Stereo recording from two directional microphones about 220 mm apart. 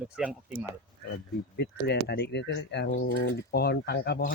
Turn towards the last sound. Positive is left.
turn(degrees=50)  # may be behind; listen again after turning